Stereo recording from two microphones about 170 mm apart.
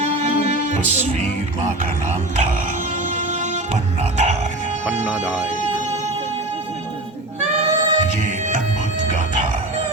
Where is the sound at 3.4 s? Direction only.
45° right (ahead or behind).